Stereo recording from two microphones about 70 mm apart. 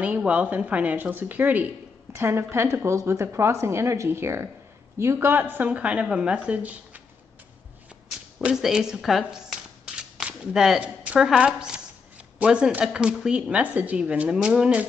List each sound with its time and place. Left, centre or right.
0.0 s a woman's voice: centre
2.1 s a woman's voice: right
5.3 s a woman's voice: right
8.5 s speech: centre